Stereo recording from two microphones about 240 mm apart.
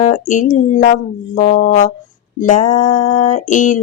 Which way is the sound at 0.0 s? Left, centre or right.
Left.